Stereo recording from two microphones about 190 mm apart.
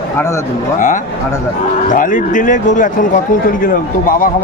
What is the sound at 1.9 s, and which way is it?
A man's voice, 45° left (ahead or behind).